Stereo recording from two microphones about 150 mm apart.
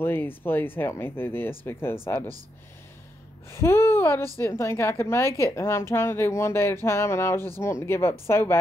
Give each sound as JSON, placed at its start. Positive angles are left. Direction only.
{"t": 0.0, "sound": "a woman's voice", "side_deg": 15}
{"t": 3.4, "sound": "a woman's voice", "side_deg": 15}